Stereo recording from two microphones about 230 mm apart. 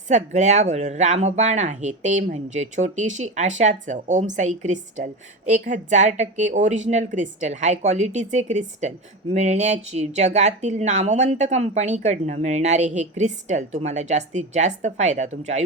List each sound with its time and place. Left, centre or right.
0.1 s speech: right